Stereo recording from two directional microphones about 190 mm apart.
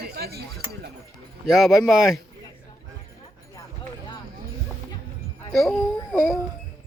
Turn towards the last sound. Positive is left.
turn(degrees=0)  # may be behind; listen again after turning